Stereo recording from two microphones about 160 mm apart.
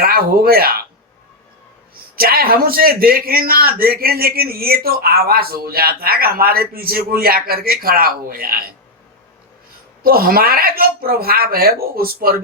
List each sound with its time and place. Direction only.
0.0 s a man's voice: 70° right (ahead or behind)
2.1 s a man's voice: 70° right (ahead or behind)
10.0 s a man's voice: 65° right (ahead or behind)